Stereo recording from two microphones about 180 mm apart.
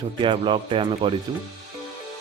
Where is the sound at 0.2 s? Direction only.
25° right (ahead or behind).